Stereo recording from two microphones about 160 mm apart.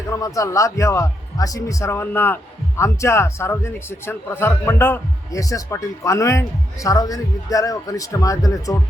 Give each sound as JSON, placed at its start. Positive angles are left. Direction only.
{"t": 0.1, "sound": "a man's voice", "side_deg": 20}